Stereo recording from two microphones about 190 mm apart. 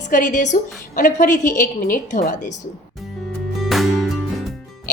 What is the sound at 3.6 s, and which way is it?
Music, centre (ahead or behind).